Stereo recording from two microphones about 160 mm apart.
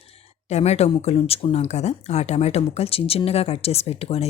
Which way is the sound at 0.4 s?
45° left (ahead or behind).